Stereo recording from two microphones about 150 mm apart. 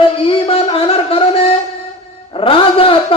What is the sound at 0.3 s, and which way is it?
Music, 40° left (ahead or behind).